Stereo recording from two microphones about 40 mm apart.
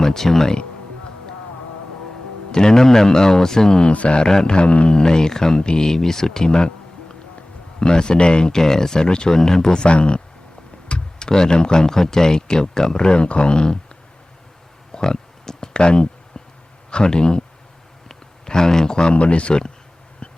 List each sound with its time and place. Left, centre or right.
0.0 s speech: centre
2.5 s speech: centre
3.8 s speech: left
4.3 s speech: centre
4.5 s speech: left
7.8 s speech: centre
14.9 s a sound: centre
16.9 s speech: left
18.1 s a sound: centre
19.1 s speech: left
20.2 s a sound: left